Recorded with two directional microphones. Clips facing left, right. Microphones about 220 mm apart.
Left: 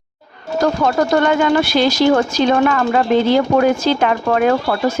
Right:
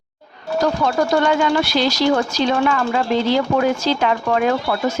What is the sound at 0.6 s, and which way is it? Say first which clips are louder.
Speech: left 3 dB; 50° left (ahead or behind).